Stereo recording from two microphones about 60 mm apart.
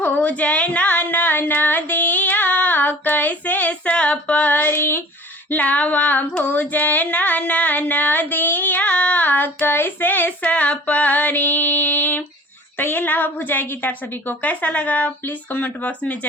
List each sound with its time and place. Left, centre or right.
0.0 s a sound: left
5.5 s female singing: left
12.7 s a woman's voice: left